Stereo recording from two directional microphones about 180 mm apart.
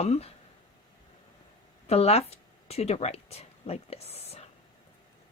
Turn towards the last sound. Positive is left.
turn(degrees=35)  # may be behind; listen again after turning